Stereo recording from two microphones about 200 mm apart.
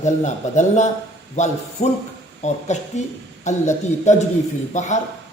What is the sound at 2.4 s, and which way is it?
Speech, 35° left (ahead or behind).